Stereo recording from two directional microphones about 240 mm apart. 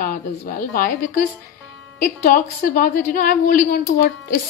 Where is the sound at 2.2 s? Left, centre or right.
Left.